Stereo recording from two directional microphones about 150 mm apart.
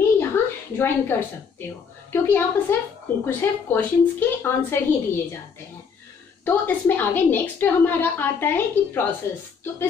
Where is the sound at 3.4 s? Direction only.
15° left (ahead or behind).